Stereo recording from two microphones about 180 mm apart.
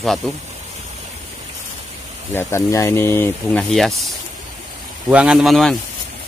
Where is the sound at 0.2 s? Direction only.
Centre (ahead or behind).